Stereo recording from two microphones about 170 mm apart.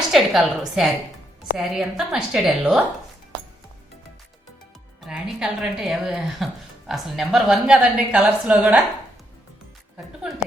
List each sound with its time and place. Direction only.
0.1 s speech: centre (ahead or behind)
5.0 s speech: 5° right (ahead or behind)